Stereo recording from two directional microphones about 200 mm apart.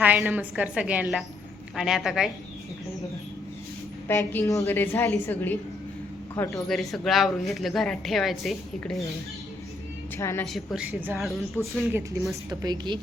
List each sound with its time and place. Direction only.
0.0 s a woman's voice: 10° right (ahead or behind)
4.1 s a woman's voice: 10° left (ahead or behind)
6.7 s speech: centre (ahead or behind)
10.2 s a woman's voice: 15° left (ahead or behind)
10.4 s speech: centre (ahead or behind)
12.5 s a woman's voice: 20° right (ahead or behind)